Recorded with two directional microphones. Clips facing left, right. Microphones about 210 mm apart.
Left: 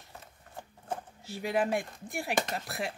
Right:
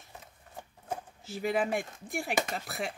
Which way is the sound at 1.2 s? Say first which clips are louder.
Even; centre (ahead or behind).